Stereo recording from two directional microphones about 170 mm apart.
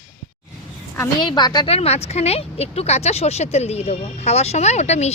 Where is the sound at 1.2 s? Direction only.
25° left (ahead or behind).